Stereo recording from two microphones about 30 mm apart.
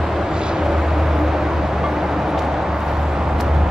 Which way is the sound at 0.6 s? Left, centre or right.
Centre.